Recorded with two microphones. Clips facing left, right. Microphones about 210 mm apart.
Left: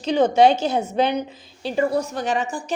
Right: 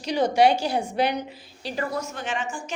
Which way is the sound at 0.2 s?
25° left (ahead or behind).